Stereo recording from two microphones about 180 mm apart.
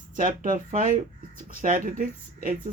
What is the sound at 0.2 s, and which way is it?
Speech, 50° right (ahead or behind).